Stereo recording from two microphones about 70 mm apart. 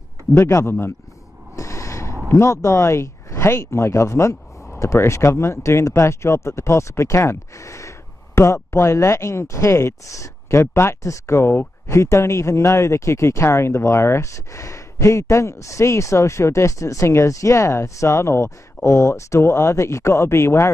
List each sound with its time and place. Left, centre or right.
0.4 s a man's voice: left
1.6 s a sound: left
2.3 s speech: left